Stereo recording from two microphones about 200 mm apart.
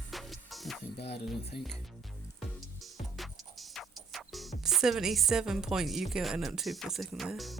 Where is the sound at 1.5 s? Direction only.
55° left (ahead or behind).